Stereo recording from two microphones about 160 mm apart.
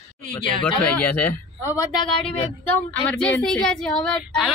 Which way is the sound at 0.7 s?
10° left (ahead or behind).